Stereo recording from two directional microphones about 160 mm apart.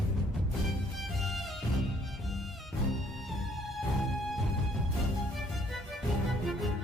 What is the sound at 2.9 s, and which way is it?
Music, centre (ahead or behind).